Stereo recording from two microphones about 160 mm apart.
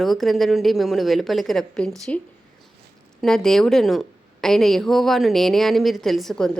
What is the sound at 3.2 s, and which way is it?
Speech, 5° left (ahead or behind).